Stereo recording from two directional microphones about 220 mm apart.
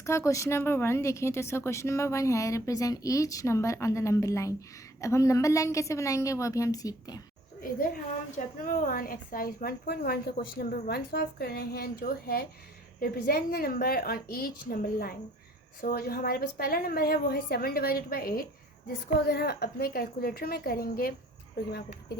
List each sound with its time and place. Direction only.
0.0 s a woman's voice: 15° left (ahead or behind)
7.6 s a woman's voice: 40° left (ahead or behind)